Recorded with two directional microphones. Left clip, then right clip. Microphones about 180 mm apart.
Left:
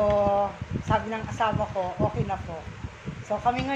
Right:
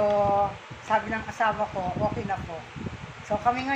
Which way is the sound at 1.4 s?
50° left (ahead or behind).